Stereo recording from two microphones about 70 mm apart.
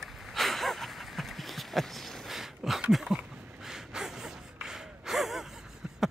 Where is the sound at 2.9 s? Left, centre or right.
Centre.